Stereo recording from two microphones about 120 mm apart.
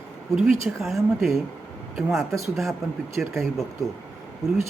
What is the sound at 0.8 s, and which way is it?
Speech, centre (ahead or behind).